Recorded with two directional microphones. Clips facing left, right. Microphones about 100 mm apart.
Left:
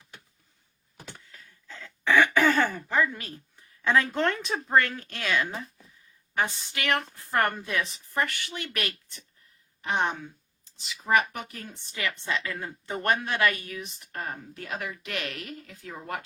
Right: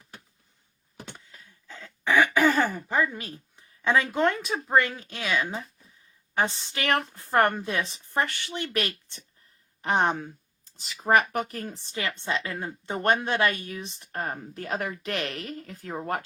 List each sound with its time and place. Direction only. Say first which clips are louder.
1.0 s throat clearing: left 2 dB; 20° right (ahead or behind)
2.6 s a sound: right 1 dB; 5° right (ahead or behind)
2.9 s speech: even; 20° right (ahead or behind)
6.3 s a woman's voice: right 2 dB; 30° right (ahead or behind)
9.8 s speech: right 4 dB; 35° right (ahead or behind)